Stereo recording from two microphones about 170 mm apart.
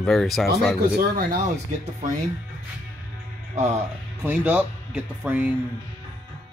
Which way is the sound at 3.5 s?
40° right (ahead or behind).